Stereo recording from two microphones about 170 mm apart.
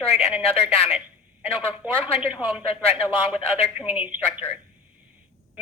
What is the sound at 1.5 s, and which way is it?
A woman's voice, 10° right (ahead or behind).